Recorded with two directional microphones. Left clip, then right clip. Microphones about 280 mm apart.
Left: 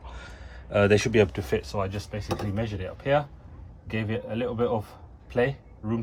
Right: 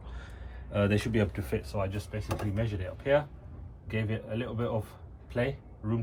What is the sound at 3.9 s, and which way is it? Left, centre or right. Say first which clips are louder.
Speech: left 4 dB; left.